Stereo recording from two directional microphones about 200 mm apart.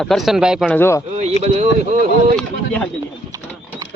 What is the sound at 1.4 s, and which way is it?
Speech, 35° right (ahead or behind).